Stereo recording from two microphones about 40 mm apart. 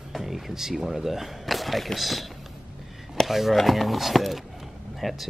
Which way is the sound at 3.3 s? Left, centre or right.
Centre.